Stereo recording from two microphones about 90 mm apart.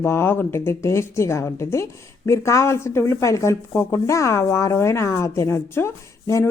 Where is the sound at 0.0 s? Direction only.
25° left (ahead or behind).